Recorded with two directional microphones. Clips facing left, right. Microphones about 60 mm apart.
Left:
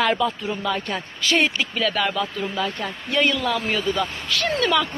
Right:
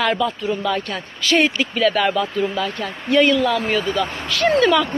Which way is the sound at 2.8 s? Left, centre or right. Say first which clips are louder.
Right 8 dB; centre.